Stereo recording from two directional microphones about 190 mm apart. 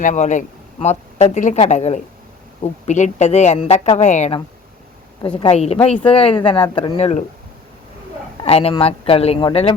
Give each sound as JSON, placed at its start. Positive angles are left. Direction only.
{"t": 0.0, "sound": "a woman's voice", "side_deg": 40}
{"t": 5.4, "sound": "a woman's voice", "side_deg": 30}
{"t": 8.4, "sound": "a woman's voice", "side_deg": 30}